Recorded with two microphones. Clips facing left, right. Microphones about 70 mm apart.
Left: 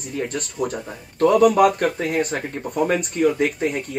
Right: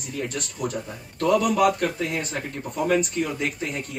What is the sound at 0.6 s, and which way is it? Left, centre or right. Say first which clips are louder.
Speech: left 5 dB; left.